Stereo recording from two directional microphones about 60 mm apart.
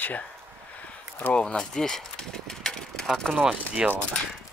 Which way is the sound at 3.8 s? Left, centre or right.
Centre.